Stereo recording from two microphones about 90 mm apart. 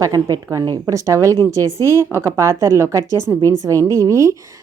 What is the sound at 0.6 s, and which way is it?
Speech, 50° right (ahead or behind).